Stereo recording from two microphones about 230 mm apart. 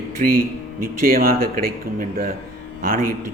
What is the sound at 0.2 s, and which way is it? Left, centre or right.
Speech, right.